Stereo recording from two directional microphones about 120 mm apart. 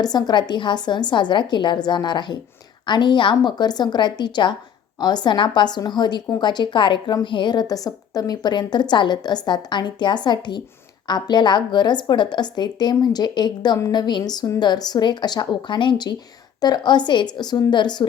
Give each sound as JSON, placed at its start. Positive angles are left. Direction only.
{"t": 0.0, "sound": "a woman's voice", "side_deg": 35}